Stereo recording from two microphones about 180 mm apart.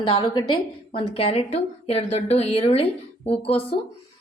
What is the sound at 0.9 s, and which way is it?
A woman's voice, 30° left (ahead or behind).